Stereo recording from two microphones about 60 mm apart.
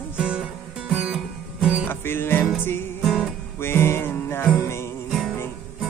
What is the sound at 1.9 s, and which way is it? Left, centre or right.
Music, left.